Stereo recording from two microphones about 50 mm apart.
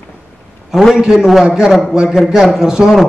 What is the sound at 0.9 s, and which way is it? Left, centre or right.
A man's voice, centre.